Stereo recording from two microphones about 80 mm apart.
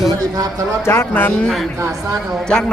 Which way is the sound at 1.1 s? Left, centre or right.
Left.